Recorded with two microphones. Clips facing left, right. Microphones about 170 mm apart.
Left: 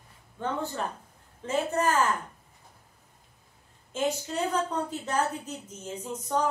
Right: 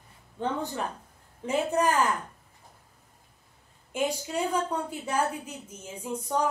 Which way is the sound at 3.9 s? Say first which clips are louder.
Even; 10° right (ahead or behind).